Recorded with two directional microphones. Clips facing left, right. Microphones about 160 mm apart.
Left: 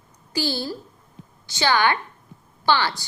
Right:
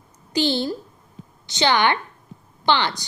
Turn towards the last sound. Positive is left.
turn(degrees=-20)  # may be behind; listen again after turning